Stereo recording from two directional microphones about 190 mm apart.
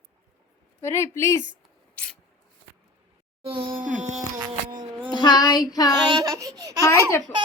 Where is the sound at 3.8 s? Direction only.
40° right (ahead or behind).